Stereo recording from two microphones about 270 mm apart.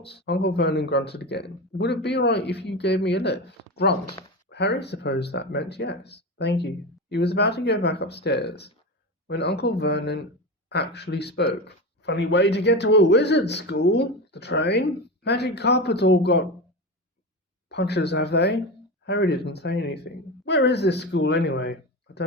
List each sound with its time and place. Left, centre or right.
0.0 s speech: left
17.7 s speech: left